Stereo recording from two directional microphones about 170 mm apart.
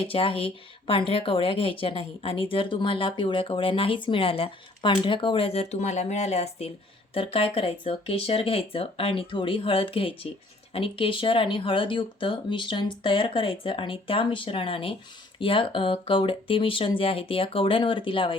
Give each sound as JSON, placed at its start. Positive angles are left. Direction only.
{"t": 0.0, "sound": "speech", "side_deg": 30}